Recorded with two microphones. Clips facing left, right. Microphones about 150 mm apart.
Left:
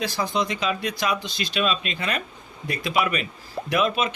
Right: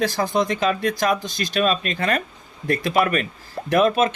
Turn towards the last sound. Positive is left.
turn(degrees=-45)  # may be behind; listen again after turning